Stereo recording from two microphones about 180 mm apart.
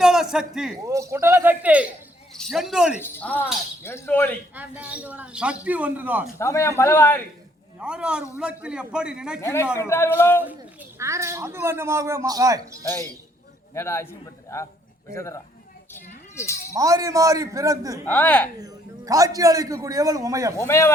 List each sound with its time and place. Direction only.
0.0 s a man's voice: 5° right (ahead or behind)
0.8 s a man's voice: 15° right (ahead or behind)
3.0 s a man's voice: 10° left (ahead or behind)
4.5 s speech: 10° right (ahead or behind)
6.4 s a man's voice: 15° left (ahead or behind)
7.8 s a man's voice: 5° right (ahead or behind)
9.4 s a man's voice: 15° left (ahead or behind)
10.8 s speech: 15° right (ahead or behind)
13.7 s a man's voice: 15° left (ahead or behind)
16.7 s a man's voice: 20° right (ahead or behind)
18.0 s a man's voice: 10° left (ahead or behind)
18.6 s a man's voice: 20° right (ahead or behind)
20.6 s a man's voice: 15° left (ahead or behind)